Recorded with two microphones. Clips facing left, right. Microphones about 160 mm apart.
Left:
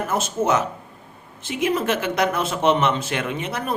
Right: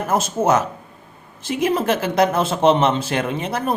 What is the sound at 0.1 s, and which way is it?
A man's voice, 40° right (ahead or behind).